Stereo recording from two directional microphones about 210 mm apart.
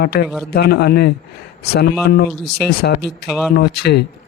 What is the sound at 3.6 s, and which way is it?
Speech, 50° left (ahead or behind).